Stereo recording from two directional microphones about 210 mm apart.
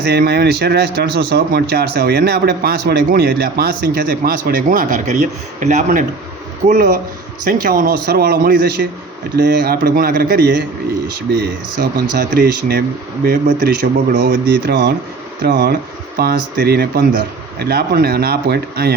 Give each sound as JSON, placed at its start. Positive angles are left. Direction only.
{"t": 0.0, "sound": "speech", "side_deg": -50}